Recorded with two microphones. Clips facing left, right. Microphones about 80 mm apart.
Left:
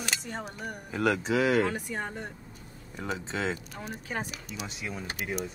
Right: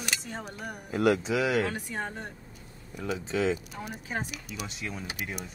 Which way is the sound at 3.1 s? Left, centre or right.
Left.